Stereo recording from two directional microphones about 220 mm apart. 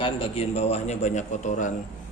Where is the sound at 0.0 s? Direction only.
25° left (ahead or behind).